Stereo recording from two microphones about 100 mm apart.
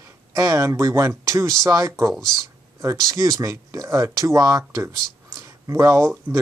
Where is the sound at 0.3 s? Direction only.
30° right (ahead or behind).